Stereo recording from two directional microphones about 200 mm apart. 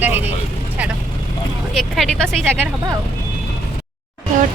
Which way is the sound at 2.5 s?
10° right (ahead or behind).